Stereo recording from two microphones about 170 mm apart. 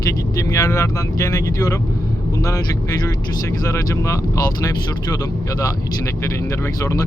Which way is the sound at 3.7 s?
20° left (ahead or behind).